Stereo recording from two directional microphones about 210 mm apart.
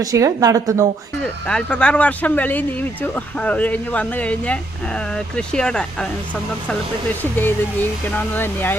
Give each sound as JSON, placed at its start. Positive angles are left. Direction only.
{"t": 0.0, "sound": "a woman's voice", "side_deg": -15}
{"t": 1.2, "sound": "speech", "side_deg": 5}
{"t": 7.2, "sound": "speech", "side_deg": 10}